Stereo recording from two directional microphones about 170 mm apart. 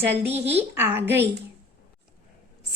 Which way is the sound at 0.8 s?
10° right (ahead or behind).